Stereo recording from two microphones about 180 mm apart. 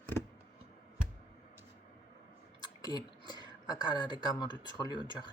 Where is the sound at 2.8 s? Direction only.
20° left (ahead or behind).